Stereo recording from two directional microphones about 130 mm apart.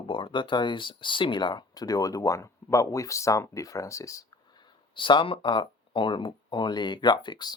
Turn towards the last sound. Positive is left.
turn(degrees=35)  # may be behind; listen again after turning